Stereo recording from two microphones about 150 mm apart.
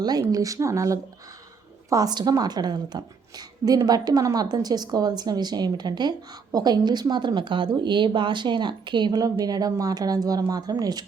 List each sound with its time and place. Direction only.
0.0 s a woman's voice: 25° right (ahead or behind)